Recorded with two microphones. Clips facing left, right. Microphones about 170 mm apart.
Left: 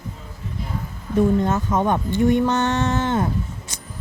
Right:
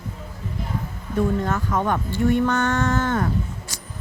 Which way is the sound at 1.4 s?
20° left (ahead or behind).